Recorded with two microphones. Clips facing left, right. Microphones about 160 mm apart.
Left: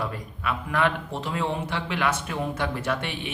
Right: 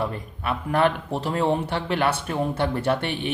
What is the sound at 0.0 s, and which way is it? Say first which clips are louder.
A man's voice: right 3 dB; 35° right (ahead or behind).